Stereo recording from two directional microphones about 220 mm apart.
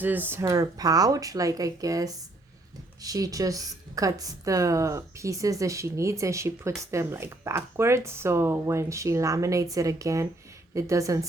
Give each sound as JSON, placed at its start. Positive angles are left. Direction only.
{"t": 0.0, "sound": "a woman's voice", "side_deg": -10}